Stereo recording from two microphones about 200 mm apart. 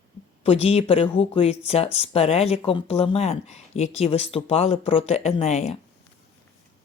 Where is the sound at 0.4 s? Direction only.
30° left (ahead or behind).